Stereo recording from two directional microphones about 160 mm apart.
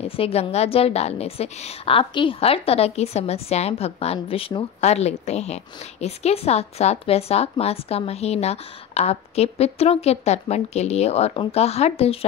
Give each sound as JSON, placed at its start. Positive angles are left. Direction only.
{"t": 0.1, "sound": "a woman's voice", "side_deg": 40}